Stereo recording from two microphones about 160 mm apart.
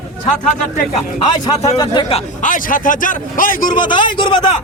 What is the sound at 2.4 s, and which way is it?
A man's voice, 55° left (ahead or behind).